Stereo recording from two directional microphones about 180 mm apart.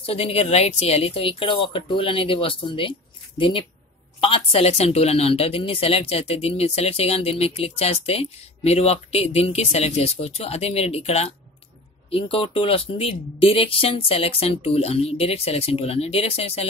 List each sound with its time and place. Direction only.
0.0 s speech: 30° left (ahead or behind)